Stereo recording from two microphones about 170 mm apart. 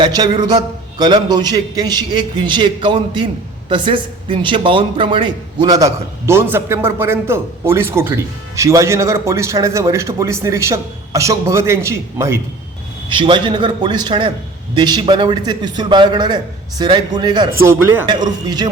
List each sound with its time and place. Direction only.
0.0 s a man's voice: 25° right (ahead or behind)
13.1 s a man's voice: 30° right (ahead or behind)
17.6 s a man's voice: 15° right (ahead or behind)